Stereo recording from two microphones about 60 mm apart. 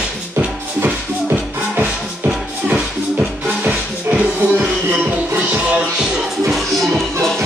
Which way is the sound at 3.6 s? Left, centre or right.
Right.